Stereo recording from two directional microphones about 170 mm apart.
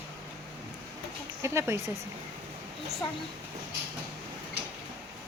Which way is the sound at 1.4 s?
15° right (ahead or behind).